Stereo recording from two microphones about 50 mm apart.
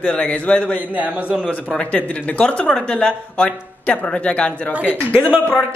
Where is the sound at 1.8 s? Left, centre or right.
Left.